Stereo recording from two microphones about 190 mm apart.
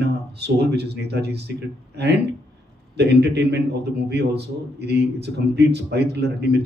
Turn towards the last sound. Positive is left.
turn(degrees=-60)  # may be behind; listen again after turning